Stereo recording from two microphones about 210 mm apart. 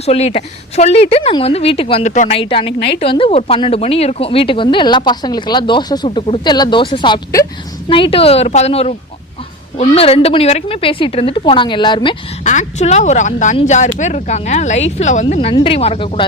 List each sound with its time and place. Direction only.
0.0 s speech: 30° left (ahead or behind)
12.5 s speech: 35° left (ahead or behind)